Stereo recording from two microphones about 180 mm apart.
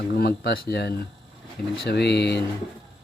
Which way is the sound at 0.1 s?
65° left (ahead or behind).